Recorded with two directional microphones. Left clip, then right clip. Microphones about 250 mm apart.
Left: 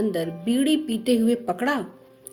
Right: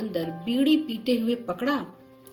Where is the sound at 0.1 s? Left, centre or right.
Left.